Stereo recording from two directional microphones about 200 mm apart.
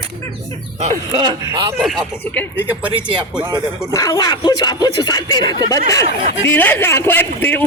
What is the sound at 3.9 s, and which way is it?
Speech, 15° left (ahead or behind).